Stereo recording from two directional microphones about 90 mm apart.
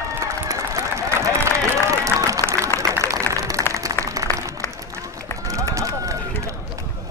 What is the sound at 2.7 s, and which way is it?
Applause, 25° left (ahead or behind).